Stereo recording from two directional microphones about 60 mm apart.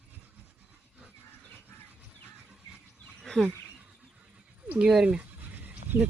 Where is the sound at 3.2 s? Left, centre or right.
Centre.